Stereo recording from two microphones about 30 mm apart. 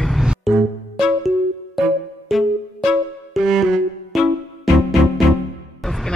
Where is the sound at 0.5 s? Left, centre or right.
Centre.